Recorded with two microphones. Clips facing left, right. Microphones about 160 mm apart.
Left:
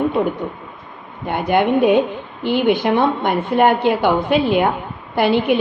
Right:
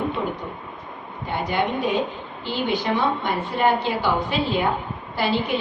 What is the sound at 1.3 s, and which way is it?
A woman's voice, 55° left (ahead or behind).